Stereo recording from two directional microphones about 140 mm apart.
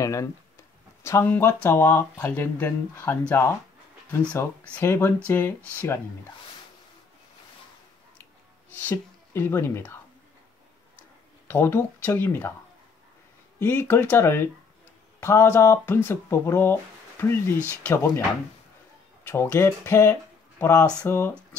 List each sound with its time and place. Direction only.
0.0 s speech: 20° left (ahead or behind)
8.2 s a sound: 10° left (ahead or behind)
8.9 s speech: 15° left (ahead or behind)
11.4 s speech: 15° left (ahead or behind)
13.6 s speech: 15° left (ahead or behind)
19.2 s speech: 20° left (ahead or behind)